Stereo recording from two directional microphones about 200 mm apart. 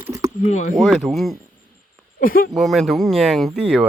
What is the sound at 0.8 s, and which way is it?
Speech, centre (ahead or behind).